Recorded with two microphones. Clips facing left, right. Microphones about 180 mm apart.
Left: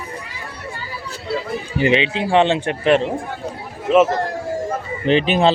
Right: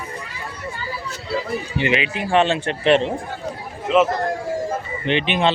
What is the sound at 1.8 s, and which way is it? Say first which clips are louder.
Speech: left 6 dB; 30° left (ahead or behind).